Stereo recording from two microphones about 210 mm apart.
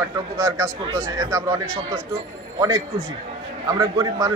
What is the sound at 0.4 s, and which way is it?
A man's voice, 15° right (ahead or behind).